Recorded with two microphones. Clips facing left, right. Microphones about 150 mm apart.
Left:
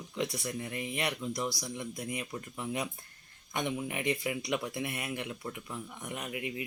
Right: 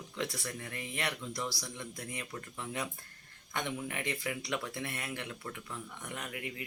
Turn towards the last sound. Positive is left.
turn(degrees=20)  # may be behind; listen again after turning